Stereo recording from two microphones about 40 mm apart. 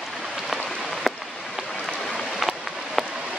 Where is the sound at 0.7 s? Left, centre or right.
Centre.